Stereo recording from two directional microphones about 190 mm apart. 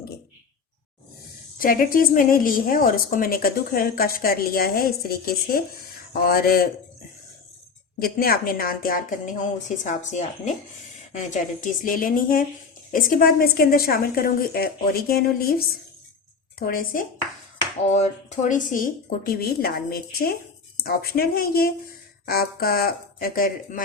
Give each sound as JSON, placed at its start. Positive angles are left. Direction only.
{"t": 1.5, "sound": "a woman's voice", "side_deg": 45}
{"t": 7.9, "sound": "a woman's voice", "side_deg": 50}
{"t": 11.6, "sound": "a woman's voice", "side_deg": 45}
{"t": 17.9, "sound": "a woman's voice", "side_deg": 35}